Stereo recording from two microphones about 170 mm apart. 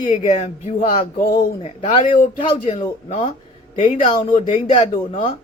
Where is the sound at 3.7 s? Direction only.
45° left (ahead or behind).